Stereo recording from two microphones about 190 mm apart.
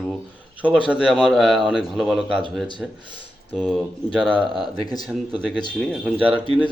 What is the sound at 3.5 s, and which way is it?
Speech, 5° left (ahead or behind).